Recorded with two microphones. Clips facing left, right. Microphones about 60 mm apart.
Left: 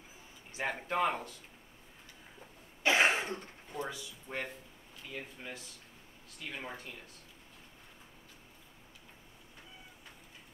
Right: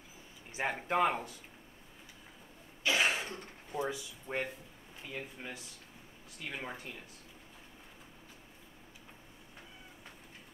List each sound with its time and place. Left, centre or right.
0.5 s speech: centre
2.8 s cough: left
3.7 s speech: centre